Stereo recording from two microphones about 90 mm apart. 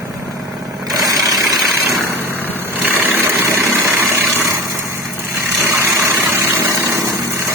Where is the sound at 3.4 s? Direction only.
30° right (ahead or behind).